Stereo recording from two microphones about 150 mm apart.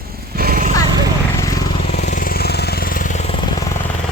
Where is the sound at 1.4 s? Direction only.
20° left (ahead or behind).